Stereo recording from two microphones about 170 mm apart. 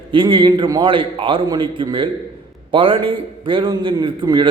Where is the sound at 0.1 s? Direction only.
30° right (ahead or behind).